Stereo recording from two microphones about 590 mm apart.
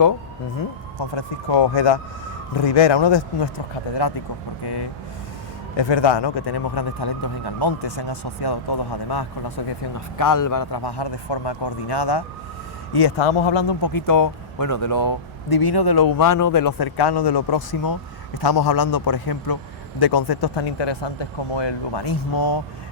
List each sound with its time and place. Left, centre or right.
1.1 s speech: left
4.6 s speech: left